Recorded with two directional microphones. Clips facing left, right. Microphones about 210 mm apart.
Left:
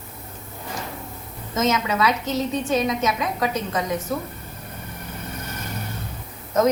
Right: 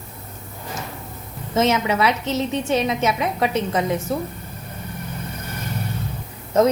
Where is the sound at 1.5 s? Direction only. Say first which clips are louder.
Right 3 dB; 25° right (ahead or behind).